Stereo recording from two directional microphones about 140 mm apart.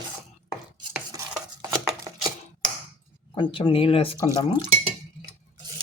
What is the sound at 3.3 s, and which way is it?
Speech, 40° left (ahead or behind).